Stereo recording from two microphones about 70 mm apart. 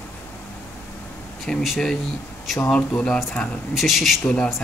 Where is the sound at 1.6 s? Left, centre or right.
Centre.